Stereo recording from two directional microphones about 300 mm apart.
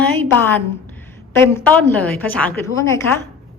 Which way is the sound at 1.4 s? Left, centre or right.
Centre.